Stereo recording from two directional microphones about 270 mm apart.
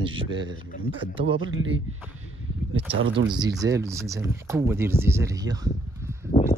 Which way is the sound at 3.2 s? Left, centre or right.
Centre.